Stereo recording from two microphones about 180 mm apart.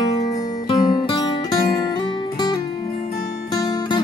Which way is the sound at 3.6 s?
25° left (ahead or behind).